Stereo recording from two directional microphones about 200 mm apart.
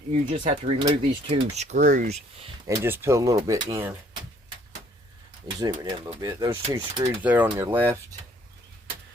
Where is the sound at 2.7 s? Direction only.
10° right (ahead or behind).